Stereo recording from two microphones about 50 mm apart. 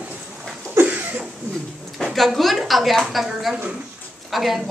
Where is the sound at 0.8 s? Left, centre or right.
Right.